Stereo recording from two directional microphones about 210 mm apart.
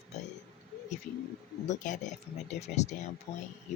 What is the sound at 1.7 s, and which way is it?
Speech, 35° left (ahead or behind).